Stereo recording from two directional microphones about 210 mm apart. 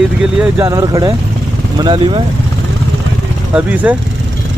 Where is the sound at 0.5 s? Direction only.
15° right (ahead or behind).